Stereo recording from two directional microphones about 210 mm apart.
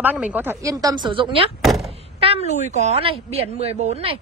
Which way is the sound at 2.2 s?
25° right (ahead or behind).